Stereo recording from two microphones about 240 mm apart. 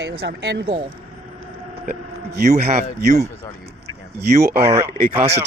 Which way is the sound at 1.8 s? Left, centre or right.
Right.